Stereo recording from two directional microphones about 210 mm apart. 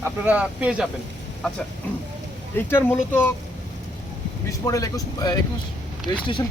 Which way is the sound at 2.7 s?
10° left (ahead or behind).